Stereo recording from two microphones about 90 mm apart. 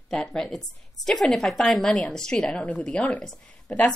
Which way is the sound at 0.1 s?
5° left (ahead or behind).